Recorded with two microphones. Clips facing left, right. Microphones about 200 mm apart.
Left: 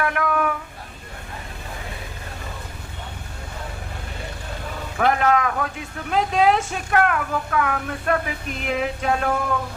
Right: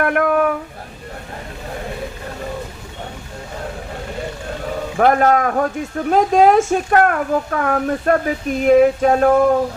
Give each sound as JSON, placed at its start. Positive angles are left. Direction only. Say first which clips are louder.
{"t": 0.0, "sound": "speech", "louder": "right 7 dB", "side_deg": -50}
{"t": 4.9, "sound": "speech", "louder": "right 5 dB", "side_deg": -45}